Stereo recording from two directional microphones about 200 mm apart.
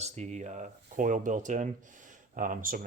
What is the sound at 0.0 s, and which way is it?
Speech, 35° right (ahead or behind).